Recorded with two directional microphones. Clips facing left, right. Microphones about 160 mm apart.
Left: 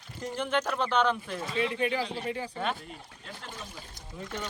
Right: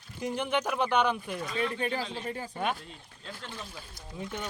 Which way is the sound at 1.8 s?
40° right (ahead or behind).